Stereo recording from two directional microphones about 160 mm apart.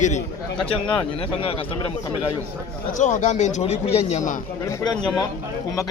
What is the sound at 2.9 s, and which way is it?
Speech, 50° left (ahead or behind).